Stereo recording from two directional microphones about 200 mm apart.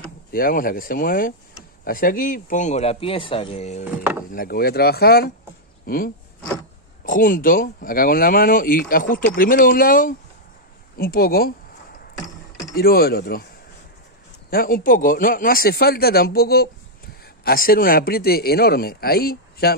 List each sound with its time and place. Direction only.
0.3 s speech: 45° left (ahead or behind)
4.3 s speech: 50° left (ahead or behind)
12.7 s speech: 50° left (ahead or behind)
14.5 s speech: 45° left (ahead or behind)